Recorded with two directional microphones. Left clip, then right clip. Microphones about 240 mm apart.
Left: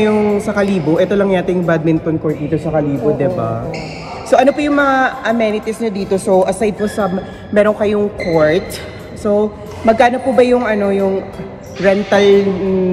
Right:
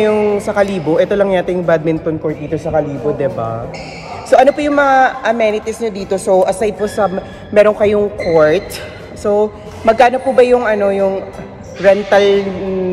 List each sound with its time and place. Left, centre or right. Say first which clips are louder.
0.0 s speech: right 1 dB; centre
4.3 s a woman's voice: right 2 dB; right